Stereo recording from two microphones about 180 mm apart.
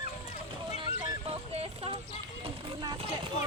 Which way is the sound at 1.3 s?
35° right (ahead or behind).